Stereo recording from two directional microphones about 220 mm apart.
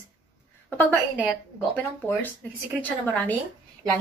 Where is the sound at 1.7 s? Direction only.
10° left (ahead or behind).